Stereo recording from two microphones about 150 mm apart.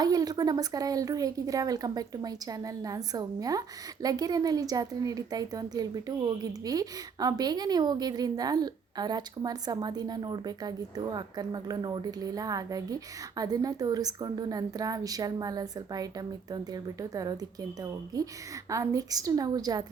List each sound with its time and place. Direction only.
0.0 s speech: 25° right (ahead or behind)